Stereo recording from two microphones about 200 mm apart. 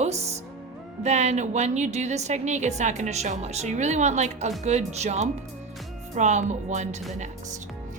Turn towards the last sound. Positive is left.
turn(degrees=-35)  # may be behind; listen again after turning